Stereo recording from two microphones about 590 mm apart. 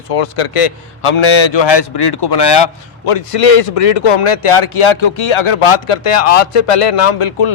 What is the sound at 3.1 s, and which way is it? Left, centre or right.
Speech, left.